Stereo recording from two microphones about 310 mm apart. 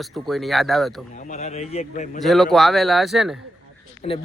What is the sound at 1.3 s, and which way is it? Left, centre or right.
Speech, left.